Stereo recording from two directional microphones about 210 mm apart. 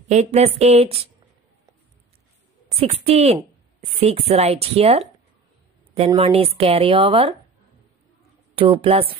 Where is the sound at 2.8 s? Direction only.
30° right (ahead or behind).